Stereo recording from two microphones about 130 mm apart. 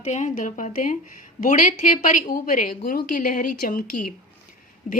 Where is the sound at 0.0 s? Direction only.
70° left (ahead or behind).